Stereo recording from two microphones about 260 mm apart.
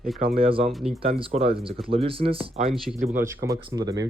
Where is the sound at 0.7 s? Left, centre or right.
Centre.